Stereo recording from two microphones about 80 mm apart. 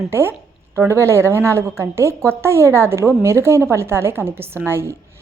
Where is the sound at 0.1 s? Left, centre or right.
Right.